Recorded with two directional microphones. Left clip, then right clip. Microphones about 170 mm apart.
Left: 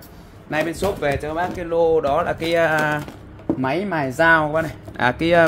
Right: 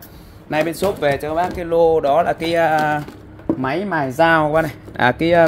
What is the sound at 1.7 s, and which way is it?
Speech, 25° right (ahead or behind).